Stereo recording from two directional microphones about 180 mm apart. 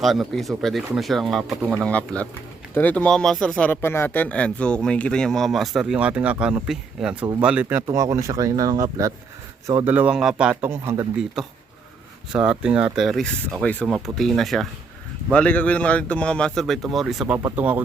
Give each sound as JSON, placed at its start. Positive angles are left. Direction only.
{"t": 0.0, "sound": "speech", "side_deg": 0}
{"t": 11.4, "sound": "speech", "side_deg": -5}